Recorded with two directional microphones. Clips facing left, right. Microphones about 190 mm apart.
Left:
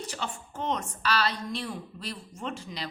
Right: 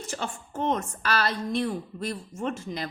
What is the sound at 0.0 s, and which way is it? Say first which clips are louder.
Speech: right 2 dB; 50° right (ahead or behind).